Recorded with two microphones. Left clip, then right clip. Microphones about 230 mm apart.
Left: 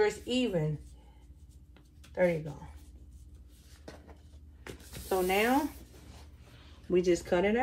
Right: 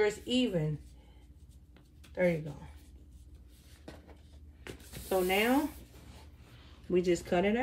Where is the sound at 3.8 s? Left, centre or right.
Centre.